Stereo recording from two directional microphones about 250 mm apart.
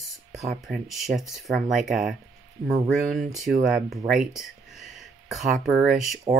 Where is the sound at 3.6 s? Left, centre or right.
Centre.